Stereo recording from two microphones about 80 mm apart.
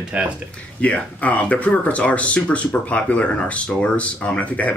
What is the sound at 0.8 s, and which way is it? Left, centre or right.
Speech, centre.